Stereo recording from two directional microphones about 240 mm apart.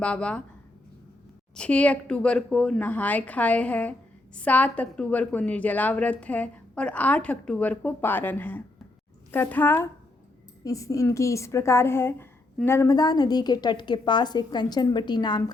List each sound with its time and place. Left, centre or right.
0.0 s a woman's voice: centre
1.5 s a woman's voice: centre